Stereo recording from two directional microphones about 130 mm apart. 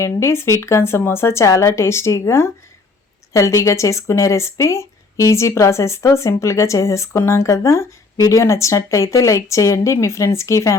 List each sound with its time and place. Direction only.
0.0 s speech: 20° left (ahead or behind)